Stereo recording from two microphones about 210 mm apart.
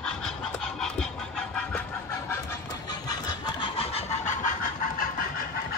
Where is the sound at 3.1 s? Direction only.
20° left (ahead or behind).